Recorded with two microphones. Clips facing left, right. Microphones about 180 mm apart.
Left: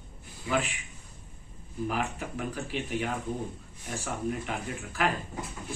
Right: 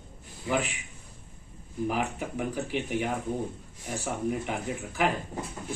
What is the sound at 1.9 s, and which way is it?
Speech, 15° right (ahead or behind).